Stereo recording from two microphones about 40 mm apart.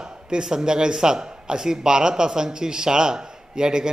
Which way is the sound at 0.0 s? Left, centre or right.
Centre.